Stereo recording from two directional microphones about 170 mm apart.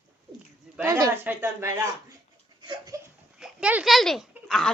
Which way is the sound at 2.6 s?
20° right (ahead or behind).